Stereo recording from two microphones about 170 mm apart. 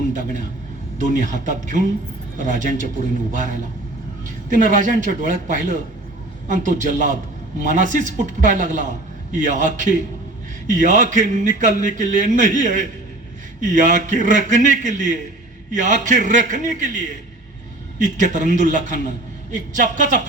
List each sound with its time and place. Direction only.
0.1 s a man's voice: 45° right (ahead or behind)